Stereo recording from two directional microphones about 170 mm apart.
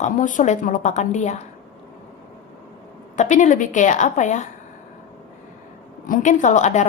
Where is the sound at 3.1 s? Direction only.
45° left (ahead or behind).